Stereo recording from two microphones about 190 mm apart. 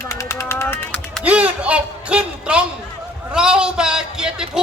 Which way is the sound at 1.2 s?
5° right (ahead or behind).